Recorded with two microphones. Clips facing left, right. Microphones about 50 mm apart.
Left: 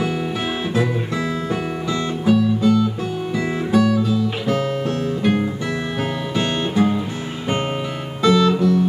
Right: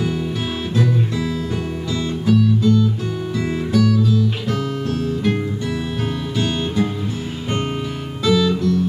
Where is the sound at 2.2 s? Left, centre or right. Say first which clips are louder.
Even; left.